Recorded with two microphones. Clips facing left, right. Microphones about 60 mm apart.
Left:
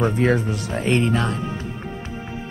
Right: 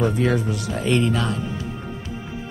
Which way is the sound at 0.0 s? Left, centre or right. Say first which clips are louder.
Left 1 dB; left.